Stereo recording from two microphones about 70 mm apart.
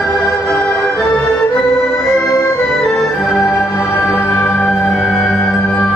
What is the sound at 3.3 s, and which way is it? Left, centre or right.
Music, centre.